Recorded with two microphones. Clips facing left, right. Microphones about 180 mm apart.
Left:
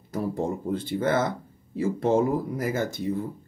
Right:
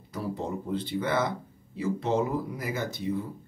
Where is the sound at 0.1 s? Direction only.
45° left (ahead or behind).